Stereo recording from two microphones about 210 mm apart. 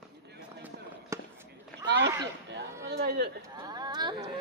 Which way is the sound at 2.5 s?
50° right (ahead or behind).